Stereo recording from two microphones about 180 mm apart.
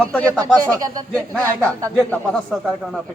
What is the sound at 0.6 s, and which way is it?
Speech, 20° right (ahead or behind).